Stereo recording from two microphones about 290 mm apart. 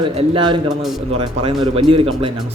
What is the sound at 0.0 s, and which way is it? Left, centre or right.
Speech, centre.